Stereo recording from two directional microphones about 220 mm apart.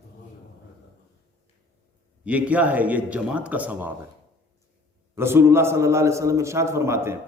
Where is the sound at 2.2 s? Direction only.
5° right (ahead or behind).